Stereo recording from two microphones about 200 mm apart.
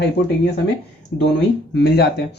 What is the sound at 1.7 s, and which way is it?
Speech, 55° left (ahead or behind).